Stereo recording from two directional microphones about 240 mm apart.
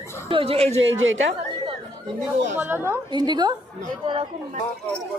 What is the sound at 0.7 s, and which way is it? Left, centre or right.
Speech, right.